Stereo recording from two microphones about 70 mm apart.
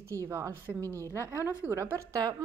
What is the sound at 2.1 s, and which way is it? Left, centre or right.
Speech, right.